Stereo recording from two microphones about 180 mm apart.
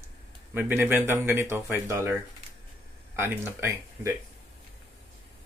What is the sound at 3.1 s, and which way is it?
Speech, 10° right (ahead or behind).